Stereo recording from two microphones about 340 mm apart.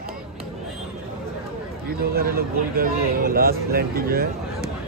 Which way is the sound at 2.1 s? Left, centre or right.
Right.